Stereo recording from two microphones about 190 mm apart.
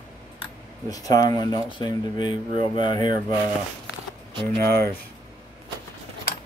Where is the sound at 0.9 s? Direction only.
20° left (ahead or behind).